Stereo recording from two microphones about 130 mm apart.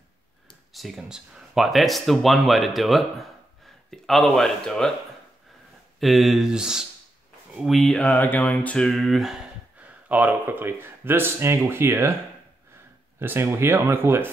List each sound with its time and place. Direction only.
0.7 s speech: 5° right (ahead or behind)
5.9 s speech: centre (ahead or behind)
9.8 s speech: 10° right (ahead or behind)
13.2 s speech: 15° right (ahead or behind)